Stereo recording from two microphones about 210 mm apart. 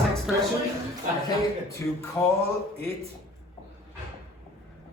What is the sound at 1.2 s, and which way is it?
Speech, 15° left (ahead or behind).